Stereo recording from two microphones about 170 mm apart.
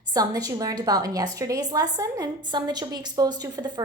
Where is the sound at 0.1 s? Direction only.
20° right (ahead or behind).